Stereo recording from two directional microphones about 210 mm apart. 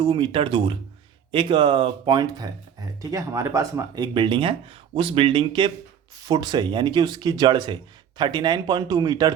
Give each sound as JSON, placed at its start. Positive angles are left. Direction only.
{"t": 0.0, "sound": "speech", "side_deg": -25}